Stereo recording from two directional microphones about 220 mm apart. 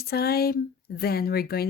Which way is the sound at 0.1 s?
45° left (ahead or behind).